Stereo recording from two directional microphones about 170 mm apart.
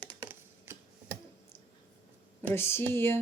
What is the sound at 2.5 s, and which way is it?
Speech, 15° left (ahead or behind).